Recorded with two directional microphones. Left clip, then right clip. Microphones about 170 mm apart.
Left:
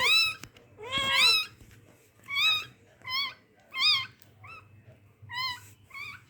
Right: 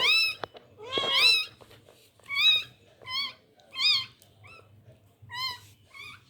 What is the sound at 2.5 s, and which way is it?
Cat, 5° left (ahead or behind).